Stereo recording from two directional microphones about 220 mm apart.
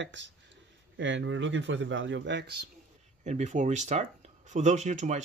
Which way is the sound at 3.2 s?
30° right (ahead or behind).